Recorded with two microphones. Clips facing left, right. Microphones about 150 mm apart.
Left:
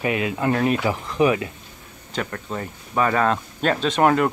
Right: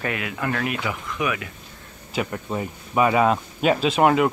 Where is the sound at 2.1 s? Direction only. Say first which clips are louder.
Right 2 dB; 10° right (ahead or behind).